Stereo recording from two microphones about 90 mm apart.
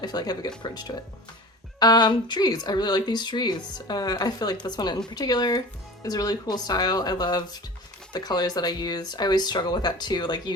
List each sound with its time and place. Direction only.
0.0 s speech: 50° left (ahead or behind)